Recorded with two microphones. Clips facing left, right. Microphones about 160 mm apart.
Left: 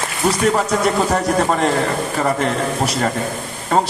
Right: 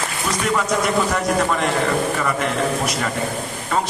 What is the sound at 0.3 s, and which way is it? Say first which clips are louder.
A man's voice: left 5 dB; 35° left (ahead or behind).